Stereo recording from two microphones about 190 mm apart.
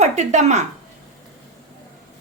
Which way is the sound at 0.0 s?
35° right (ahead or behind).